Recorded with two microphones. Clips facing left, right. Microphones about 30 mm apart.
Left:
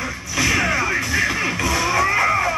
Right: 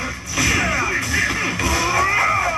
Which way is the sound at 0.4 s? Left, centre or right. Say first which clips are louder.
Even; centre.